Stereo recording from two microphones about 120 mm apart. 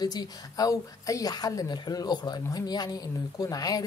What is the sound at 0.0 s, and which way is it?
A woman's voice, 35° left (ahead or behind).